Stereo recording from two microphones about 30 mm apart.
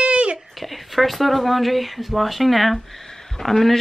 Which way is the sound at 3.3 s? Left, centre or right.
Centre.